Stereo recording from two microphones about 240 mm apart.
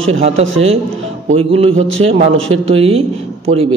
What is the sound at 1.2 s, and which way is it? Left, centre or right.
A man's voice, right.